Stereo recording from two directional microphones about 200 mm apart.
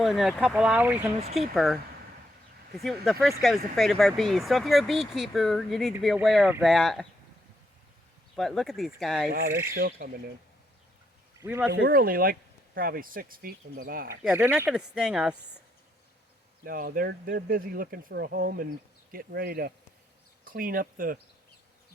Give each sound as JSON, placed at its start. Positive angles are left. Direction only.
{"t": 0.0, "sound": "speech", "side_deg": 0}
{"t": 8.4, "sound": "speech", "side_deg": 0}
{"t": 9.7, "sound": "speech", "side_deg": -45}
{"t": 11.4, "sound": "speech", "side_deg": -10}
{"t": 11.9, "sound": "speech", "side_deg": -45}
{"t": 14.3, "sound": "speech", "side_deg": -5}
{"t": 16.6, "sound": "speech", "side_deg": -45}